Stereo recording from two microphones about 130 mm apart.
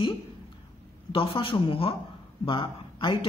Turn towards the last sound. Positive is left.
turn(degrees=40)  # may be behind; listen again after turning